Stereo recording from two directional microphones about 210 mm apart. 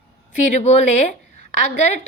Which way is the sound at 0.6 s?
30° left (ahead or behind).